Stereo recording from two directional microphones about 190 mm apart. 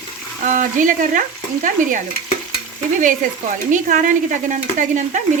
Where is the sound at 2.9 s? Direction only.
45° right (ahead or behind).